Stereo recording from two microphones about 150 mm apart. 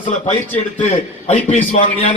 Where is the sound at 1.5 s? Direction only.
55° left (ahead or behind).